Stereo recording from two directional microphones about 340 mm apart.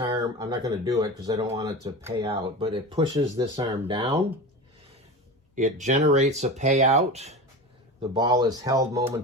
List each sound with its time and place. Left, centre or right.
0.0 s speech: centre
5.5 s speech: right